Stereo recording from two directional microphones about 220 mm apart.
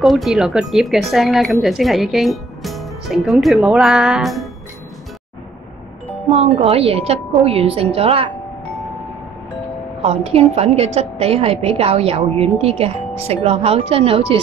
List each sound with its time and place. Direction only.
0.0 s speech: centre (ahead or behind)
6.3 s a woman's voice: 25° right (ahead or behind)
10.0 s a woman's voice: 30° right (ahead or behind)